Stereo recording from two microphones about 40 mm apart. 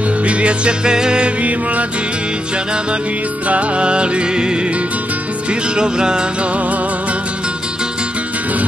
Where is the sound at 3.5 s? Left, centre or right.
Right.